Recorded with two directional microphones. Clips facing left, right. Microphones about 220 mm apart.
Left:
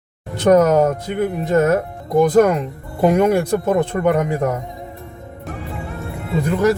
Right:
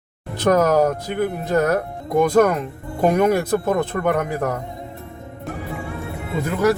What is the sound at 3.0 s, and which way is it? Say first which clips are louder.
Speech: left 2 dB; 10° left (ahead or behind).